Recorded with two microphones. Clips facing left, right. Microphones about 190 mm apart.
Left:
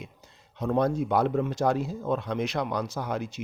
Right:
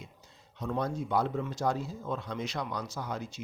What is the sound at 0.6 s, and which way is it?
Speech, 70° left (ahead or behind).